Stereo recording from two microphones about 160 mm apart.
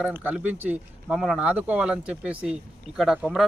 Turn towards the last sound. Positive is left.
turn(degrees=0)  # may be behind; listen again after turning